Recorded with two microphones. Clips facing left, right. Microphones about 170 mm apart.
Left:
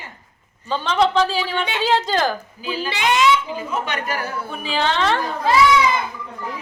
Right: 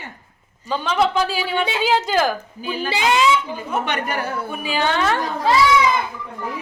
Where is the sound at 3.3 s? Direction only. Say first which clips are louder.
Even; 60° right (ahead or behind).